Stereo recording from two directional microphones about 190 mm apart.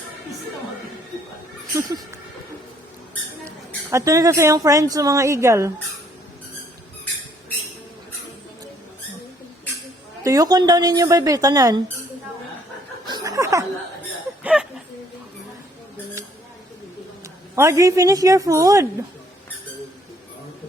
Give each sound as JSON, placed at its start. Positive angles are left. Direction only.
{"t": 1.7, "sound": "a woman's voice", "side_deg": -20}
{"t": 3.9, "sound": "a woman's voice", "side_deg": -15}
{"t": 10.2, "sound": "a woman's voice", "side_deg": -20}
{"t": 13.1, "sound": "snicker", "side_deg": -20}
{"t": 14.4, "sound": "a sound", "side_deg": -5}
{"t": 17.5, "sound": "a woman's voice", "side_deg": -15}